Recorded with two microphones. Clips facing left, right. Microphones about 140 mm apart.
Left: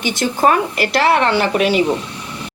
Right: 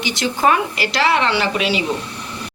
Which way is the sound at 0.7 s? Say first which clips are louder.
Left 3 dB; 50° left (ahead or behind).